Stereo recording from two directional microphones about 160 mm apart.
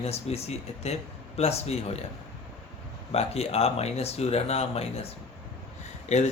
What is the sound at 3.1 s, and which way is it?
Speech, 40° left (ahead or behind).